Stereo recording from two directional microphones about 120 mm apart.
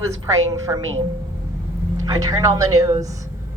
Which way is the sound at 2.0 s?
30° right (ahead or behind).